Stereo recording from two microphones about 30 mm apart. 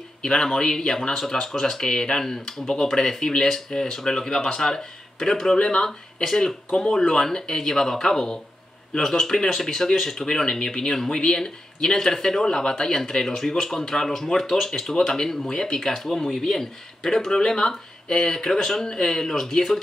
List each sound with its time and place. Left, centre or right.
0.2 s a man's voice: left
5.6 s a man's voice: left
10.2 s a man's voice: left
10.9 s speech: centre